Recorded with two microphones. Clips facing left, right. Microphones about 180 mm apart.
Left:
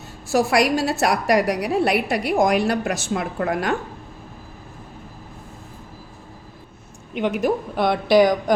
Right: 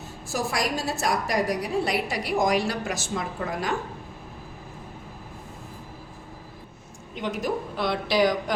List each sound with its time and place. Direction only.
0.3 s a woman's voice: 70° left (ahead or behind)
7.1 s a woman's voice: 65° left (ahead or behind)